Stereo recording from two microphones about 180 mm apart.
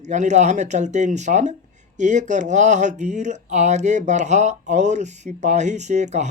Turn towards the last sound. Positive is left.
turn(degrees=-40)  # may be behind; listen again after turning